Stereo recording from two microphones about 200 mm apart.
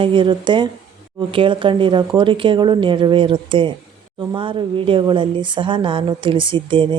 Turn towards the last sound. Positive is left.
turn(degrees=-25)  # may be behind; listen again after turning